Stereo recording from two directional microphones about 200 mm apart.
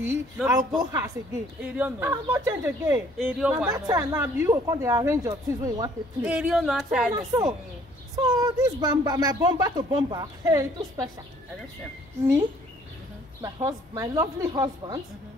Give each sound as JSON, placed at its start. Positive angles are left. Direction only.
{"t": 0.0, "sound": "speech", "side_deg": -10}
{"t": 3.6, "sound": "speech", "side_deg": -20}
{"t": 8.2, "sound": "speech", "side_deg": -20}
{"t": 13.4, "sound": "speech", "side_deg": -15}